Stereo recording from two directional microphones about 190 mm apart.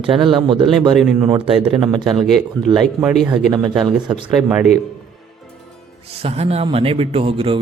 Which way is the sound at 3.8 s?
5° right (ahead or behind).